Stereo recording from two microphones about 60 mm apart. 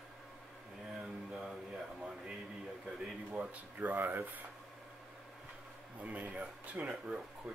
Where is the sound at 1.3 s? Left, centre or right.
Centre.